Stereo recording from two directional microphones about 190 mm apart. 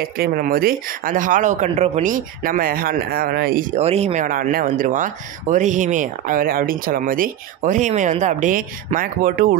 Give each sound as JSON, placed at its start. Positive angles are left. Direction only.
{"t": 0.2, "sound": "speech", "side_deg": -50}
{"t": 3.8, "sound": "speech", "side_deg": -35}